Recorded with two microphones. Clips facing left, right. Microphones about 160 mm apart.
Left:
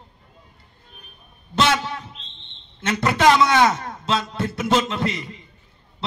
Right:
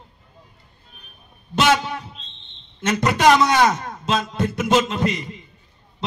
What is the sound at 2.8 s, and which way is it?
A man's voice, 15° right (ahead or behind).